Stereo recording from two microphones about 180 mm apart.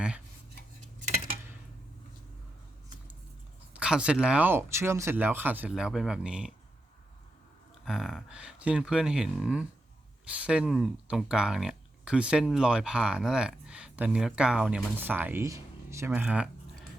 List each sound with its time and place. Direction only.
3.8 s speech: 5° right (ahead or behind)
7.9 s speech: centre (ahead or behind)